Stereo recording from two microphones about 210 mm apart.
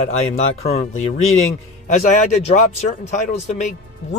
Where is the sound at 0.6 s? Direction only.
30° left (ahead or behind).